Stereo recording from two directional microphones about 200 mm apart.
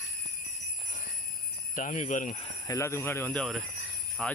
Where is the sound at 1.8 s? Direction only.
40° left (ahead or behind).